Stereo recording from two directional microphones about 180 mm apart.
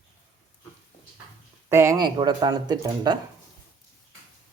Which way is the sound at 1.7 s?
15° right (ahead or behind).